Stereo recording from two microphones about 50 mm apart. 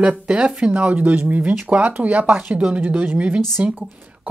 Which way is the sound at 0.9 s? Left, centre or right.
Right.